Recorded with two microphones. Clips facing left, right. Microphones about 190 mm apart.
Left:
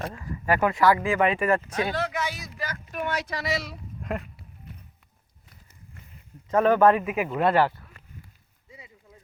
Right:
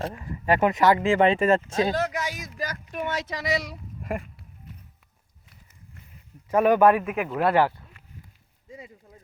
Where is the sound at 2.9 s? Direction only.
25° right (ahead or behind).